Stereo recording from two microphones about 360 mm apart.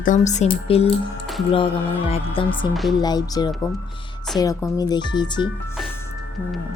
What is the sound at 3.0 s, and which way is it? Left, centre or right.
Speech, centre.